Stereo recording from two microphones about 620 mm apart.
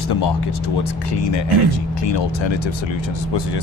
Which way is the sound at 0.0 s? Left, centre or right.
Left.